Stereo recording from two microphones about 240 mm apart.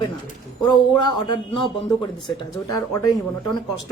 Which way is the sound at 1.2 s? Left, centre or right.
Centre.